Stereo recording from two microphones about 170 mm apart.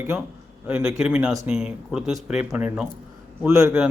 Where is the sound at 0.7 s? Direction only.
15° right (ahead or behind).